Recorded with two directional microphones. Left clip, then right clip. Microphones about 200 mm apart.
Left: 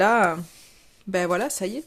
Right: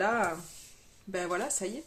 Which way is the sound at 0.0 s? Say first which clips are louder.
Left 10 dB; 55° left (ahead or behind).